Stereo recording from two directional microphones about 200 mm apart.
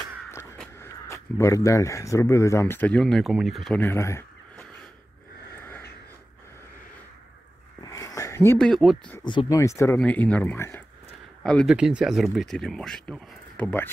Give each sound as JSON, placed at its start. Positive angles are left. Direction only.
{"t": 1.0, "sound": "speech", "side_deg": 15}
{"t": 7.8, "sound": "a sound", "side_deg": 15}
{"t": 9.2, "sound": "speech", "side_deg": 25}
{"t": 11.4, "sound": "speech", "side_deg": 0}